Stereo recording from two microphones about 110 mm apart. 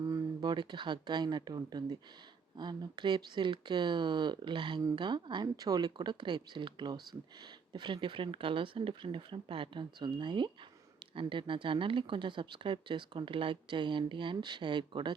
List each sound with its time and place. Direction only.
0.1 s speech: 40° right (ahead or behind)